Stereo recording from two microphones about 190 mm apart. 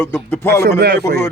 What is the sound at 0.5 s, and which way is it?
Speech, 55° right (ahead or behind).